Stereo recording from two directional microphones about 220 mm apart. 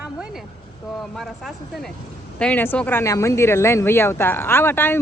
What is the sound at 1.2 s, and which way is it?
Speech, centre (ahead or behind).